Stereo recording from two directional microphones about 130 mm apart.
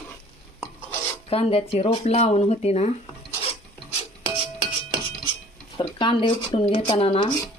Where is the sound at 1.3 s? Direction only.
50° left (ahead or behind).